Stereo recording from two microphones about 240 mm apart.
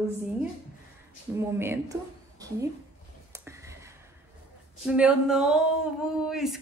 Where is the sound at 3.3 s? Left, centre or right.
Centre.